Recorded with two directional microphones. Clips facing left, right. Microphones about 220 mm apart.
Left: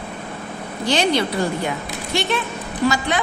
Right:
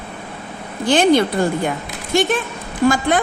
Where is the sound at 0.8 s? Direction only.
50° right (ahead or behind).